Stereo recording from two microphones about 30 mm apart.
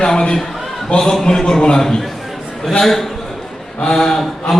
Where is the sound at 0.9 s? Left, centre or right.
Left.